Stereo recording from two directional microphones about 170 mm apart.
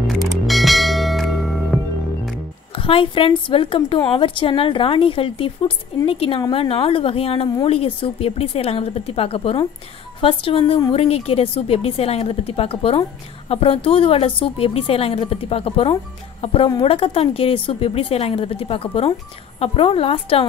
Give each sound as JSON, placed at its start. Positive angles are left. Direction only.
{"t": 0.0, "sound": "bell", "side_deg": 0}
{"t": 2.7, "sound": "speech", "side_deg": 30}